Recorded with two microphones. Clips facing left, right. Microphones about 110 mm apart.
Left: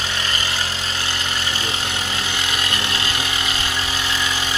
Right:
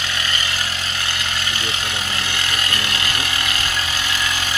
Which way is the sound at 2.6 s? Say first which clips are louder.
Even; 25° left (ahead or behind).